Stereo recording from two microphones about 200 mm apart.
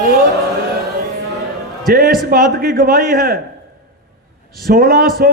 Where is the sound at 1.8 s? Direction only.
45° right (ahead or behind).